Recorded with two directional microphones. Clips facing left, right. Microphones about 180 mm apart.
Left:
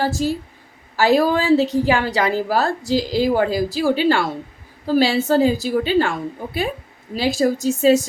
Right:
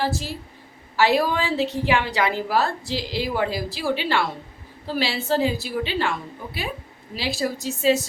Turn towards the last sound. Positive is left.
turn(degrees=45)  # may be behind; listen again after turning